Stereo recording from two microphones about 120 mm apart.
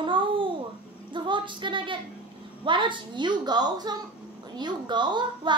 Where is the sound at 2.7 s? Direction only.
40° right (ahead or behind).